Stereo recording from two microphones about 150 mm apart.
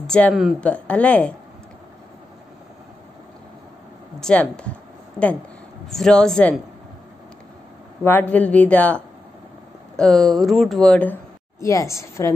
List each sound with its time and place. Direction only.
0.0 s speech: 5° left (ahead or behind)
0.7 s a man's voice: 10° left (ahead or behind)
4.2 s a man's voice: 5° left (ahead or behind)
5.9 s speech: 5° left (ahead or behind)
8.0 s a man's voice: 10° left (ahead or behind)
11.6 s a woman's voice: 20° left (ahead or behind)